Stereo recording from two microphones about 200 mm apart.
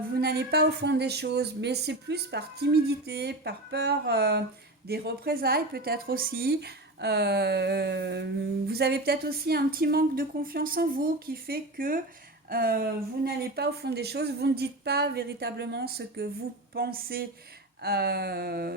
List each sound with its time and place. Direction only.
0.1 s a woman's voice: 50° right (ahead or behind)